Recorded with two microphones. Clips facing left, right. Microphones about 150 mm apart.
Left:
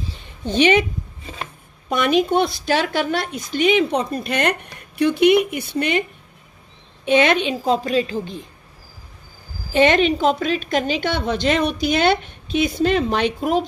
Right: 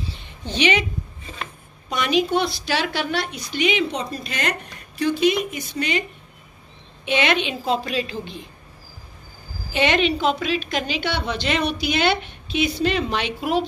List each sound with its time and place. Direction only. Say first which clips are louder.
0.5 s speech: left 5 dB; 50° left (ahead or behind)
7.1 s a child's voice: left 5 dB; 45° left (ahead or behind)
9.7 s speech: left 5 dB; 45° left (ahead or behind)